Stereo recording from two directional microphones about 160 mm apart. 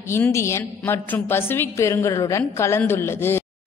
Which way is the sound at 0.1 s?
15° left (ahead or behind).